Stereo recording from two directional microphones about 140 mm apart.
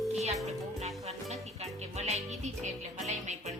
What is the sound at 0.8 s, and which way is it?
Music, 50° right (ahead or behind).